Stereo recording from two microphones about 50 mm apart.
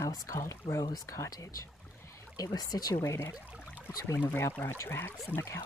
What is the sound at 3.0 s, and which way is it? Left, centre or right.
Speech, left.